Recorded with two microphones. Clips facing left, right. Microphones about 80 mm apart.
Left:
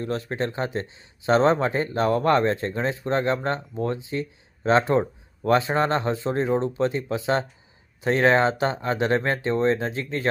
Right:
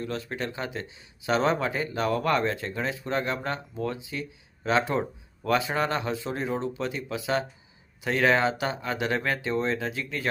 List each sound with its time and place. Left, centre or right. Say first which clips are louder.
0.0 s speech: left 5 dB; left